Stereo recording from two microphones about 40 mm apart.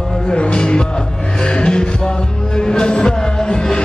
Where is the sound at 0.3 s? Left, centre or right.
Left.